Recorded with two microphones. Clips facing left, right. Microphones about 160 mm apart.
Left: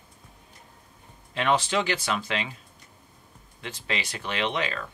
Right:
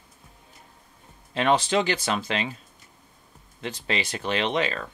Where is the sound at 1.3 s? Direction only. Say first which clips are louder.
Right 3 dB; 30° right (ahead or behind).